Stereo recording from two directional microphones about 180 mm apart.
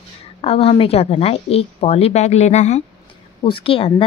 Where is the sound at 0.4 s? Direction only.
35° left (ahead or behind).